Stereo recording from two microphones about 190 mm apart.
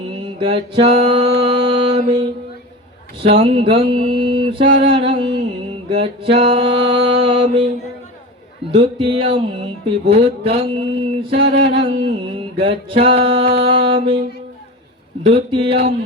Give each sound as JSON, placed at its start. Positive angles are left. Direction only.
{"t": 0.3, "sound": "music", "side_deg": -30}
{"t": 3.2, "sound": "music", "side_deg": -30}
{"t": 8.7, "sound": "music", "side_deg": -25}
{"t": 11.7, "sound": "a sound", "side_deg": -30}
{"t": 12.5, "sound": "music", "side_deg": -30}
{"t": 15.2, "sound": "music", "side_deg": -30}